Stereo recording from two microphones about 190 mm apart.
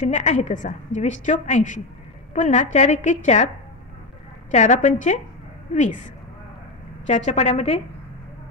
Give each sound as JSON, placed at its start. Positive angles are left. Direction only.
{"t": 0.1, "sound": "a woman's voice", "side_deg": 40}
{"t": 4.5, "sound": "a woman's voice", "side_deg": 40}
{"t": 7.1, "sound": "a woman's voice", "side_deg": 40}